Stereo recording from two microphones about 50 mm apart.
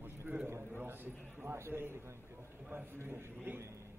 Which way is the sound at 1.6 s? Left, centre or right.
Right.